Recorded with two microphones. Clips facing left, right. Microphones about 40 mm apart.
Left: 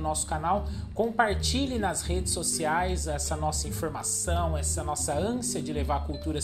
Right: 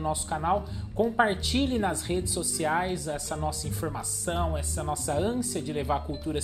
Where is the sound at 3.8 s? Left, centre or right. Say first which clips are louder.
Left 1 dB; centre.